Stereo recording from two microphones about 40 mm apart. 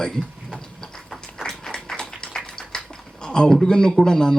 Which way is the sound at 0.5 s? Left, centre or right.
Centre.